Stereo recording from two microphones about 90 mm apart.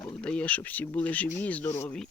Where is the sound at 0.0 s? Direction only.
10° left (ahead or behind).